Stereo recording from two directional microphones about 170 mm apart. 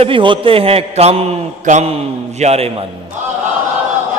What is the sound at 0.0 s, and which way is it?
A man's voice, 30° right (ahead or behind).